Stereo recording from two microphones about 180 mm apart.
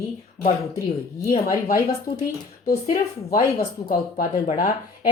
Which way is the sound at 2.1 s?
30° left (ahead or behind).